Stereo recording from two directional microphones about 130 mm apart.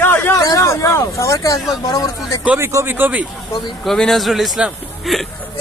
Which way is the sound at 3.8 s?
5° left (ahead or behind).